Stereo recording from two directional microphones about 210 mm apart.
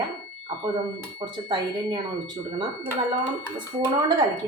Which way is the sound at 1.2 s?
20° right (ahead or behind).